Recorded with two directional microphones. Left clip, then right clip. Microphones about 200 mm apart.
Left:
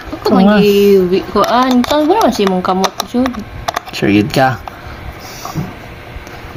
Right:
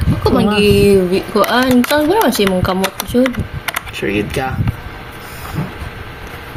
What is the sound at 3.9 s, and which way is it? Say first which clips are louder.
Speech: left 8 dB; 60° left (ahead or behind).